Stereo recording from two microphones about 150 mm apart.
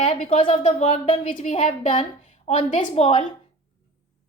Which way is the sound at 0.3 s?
40° left (ahead or behind).